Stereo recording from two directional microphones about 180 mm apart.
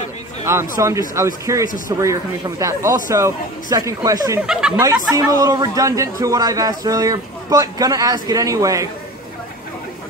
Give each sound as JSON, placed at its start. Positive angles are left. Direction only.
{"t": 0.5, "sound": "a man's voice", "side_deg": -15}
{"t": 4.4, "sound": "speech", "side_deg": -5}
{"t": 4.7, "sound": "a man's voice", "side_deg": -20}